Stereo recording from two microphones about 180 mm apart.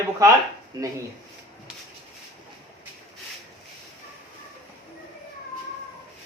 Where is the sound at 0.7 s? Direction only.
20° right (ahead or behind).